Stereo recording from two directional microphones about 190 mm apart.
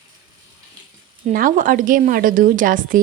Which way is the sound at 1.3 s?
45° right (ahead or behind).